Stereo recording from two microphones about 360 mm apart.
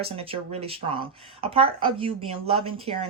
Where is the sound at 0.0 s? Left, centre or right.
Centre.